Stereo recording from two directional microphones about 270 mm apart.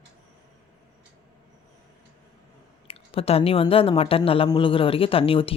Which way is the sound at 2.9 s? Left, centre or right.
Left.